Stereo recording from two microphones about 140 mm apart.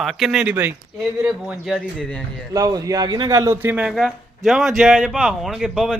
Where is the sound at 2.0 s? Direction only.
10° left (ahead or behind).